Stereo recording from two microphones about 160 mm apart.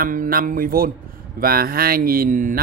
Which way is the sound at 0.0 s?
60° right (ahead or behind).